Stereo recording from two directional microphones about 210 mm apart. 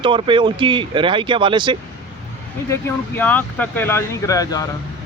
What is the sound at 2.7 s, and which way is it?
Speech, 10° left (ahead or behind).